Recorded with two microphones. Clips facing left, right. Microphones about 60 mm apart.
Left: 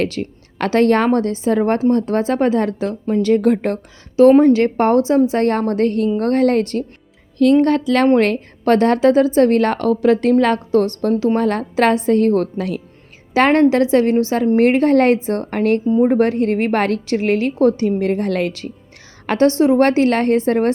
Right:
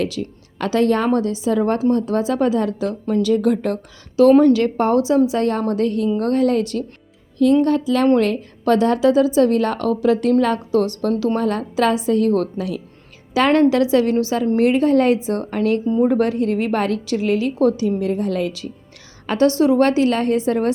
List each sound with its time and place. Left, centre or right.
0.0 s a woman's voice: left
4.2 s speech: left
4.6 s a woman's voice: left
7.6 s a woman's voice: left
13.3 s a woman's voice: left
19.3 s a woman's voice: left
19.8 s a woman's voice: left